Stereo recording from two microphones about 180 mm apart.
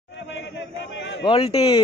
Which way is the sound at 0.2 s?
90° left.